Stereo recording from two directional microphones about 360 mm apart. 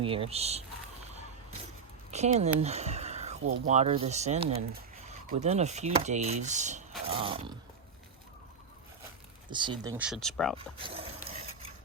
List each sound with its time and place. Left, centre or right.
0.0 s speech: centre
2.0 s speech: centre
2.6 s a sound: centre
3.7 s speech: centre
9.5 s speech: centre
10.6 s dog: centre